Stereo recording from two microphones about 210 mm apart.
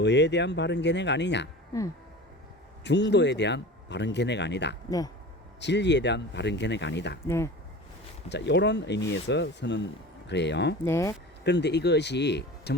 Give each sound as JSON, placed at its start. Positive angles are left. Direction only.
{"t": 0.0, "sound": "speech", "side_deg": 55}
{"t": 2.8, "sound": "speech", "side_deg": 55}
{"t": 4.9, "sound": "speech", "side_deg": 15}
{"t": 5.5, "sound": "speech", "side_deg": 55}
{"t": 7.3, "sound": "speech", "side_deg": 10}
{"t": 8.3, "sound": "speech", "side_deg": 55}
{"t": 10.8, "sound": "speech", "side_deg": 15}
{"t": 11.4, "sound": "speech", "side_deg": 55}